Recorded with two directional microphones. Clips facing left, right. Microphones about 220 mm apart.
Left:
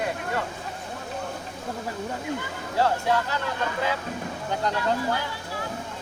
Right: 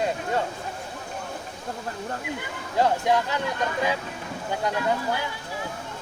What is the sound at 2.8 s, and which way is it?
Speech, 15° right (ahead or behind).